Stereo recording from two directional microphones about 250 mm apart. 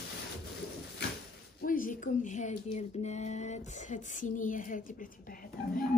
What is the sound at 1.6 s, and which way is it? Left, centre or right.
Speech, left.